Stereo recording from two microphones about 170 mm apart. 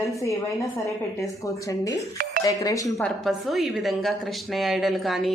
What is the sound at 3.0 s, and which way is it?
A woman's voice, 5° left (ahead or behind).